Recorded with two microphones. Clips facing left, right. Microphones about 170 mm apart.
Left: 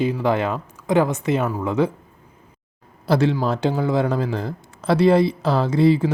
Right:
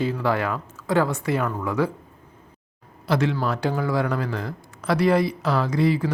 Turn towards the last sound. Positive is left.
turn(degrees=25)  # may be behind; listen again after turning